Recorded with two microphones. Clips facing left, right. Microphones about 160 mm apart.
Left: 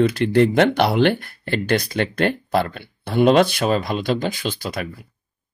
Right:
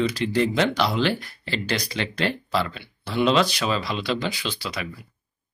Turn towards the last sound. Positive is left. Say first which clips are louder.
# left 4 dB
turn(degrees=50)  # may be behind; listen again after turning